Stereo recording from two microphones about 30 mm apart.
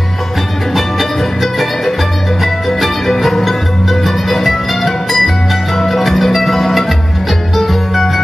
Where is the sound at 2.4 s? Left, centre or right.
Centre.